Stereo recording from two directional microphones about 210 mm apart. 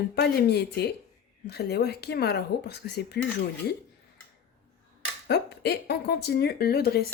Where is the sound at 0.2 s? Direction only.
50° left (ahead or behind).